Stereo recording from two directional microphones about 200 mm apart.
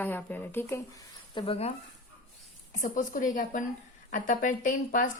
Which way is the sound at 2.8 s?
40° left (ahead or behind).